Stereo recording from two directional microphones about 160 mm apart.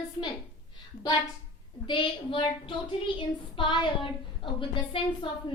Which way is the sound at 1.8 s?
30° left (ahead or behind).